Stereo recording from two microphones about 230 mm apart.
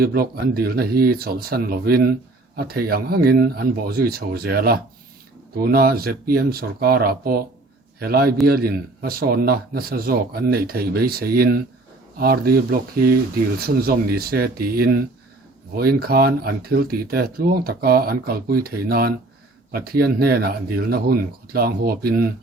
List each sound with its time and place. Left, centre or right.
0.0 s speech: right